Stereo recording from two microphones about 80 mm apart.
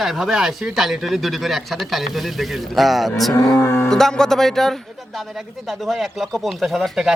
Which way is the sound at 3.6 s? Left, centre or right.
Left.